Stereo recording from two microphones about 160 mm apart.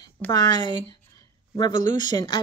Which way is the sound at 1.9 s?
30° left (ahead or behind).